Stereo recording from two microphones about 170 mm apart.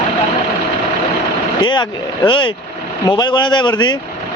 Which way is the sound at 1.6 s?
25° left (ahead or behind).